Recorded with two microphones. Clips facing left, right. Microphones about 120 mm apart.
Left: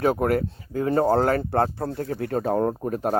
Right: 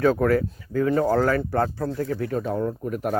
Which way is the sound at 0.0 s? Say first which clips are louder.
Right 2 dB; 25° left (ahead or behind).